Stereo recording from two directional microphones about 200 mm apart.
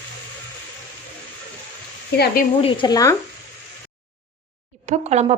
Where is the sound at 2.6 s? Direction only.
25° left (ahead or behind).